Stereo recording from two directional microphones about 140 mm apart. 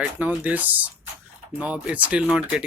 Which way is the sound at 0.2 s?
10° right (ahead or behind).